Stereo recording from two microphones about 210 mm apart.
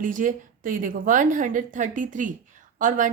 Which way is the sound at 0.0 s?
40° right (ahead or behind).